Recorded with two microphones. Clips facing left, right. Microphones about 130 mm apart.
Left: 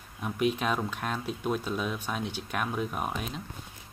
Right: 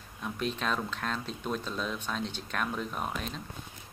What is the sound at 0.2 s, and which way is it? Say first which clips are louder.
Speech: left 5 dB; 10° left (ahead or behind).